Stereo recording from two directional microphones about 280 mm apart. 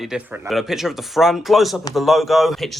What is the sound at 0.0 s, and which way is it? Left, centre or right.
Speech, centre.